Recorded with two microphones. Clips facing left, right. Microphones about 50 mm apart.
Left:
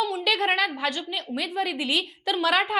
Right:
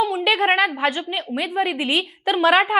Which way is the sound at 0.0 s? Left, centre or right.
Right.